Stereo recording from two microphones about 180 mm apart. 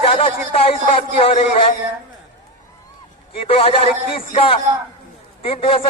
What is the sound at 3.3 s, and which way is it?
A man's voice, 30° left (ahead or behind).